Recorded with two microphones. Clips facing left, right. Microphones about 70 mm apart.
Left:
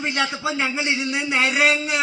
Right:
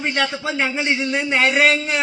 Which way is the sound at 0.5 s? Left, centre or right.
Right.